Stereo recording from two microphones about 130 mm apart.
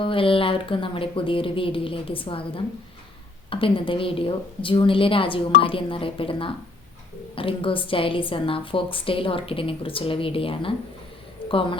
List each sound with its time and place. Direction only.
0.0 s a woman's voice: 45° left (ahead or behind)
3.5 s a woman's voice: 45° left (ahead or behind)